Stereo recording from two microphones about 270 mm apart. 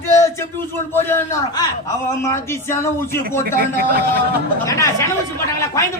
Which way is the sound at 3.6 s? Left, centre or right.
Right.